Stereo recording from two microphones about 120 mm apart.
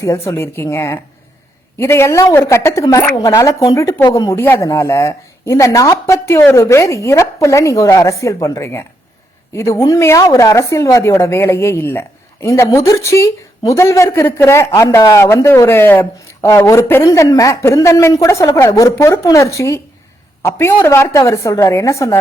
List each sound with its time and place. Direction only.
0.0 s speech: 25° left (ahead or behind)
20.8 s speech: 20° left (ahead or behind)